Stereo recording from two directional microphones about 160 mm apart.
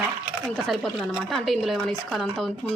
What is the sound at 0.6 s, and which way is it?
Speech, centre (ahead or behind).